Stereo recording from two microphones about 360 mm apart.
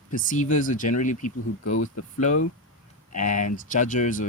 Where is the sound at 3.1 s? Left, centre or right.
Left.